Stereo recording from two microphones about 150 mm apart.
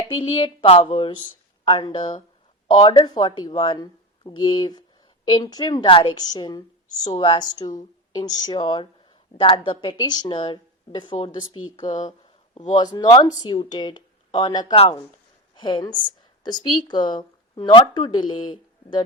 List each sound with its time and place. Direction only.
0.2 s a woman's voice: 40° left (ahead or behind)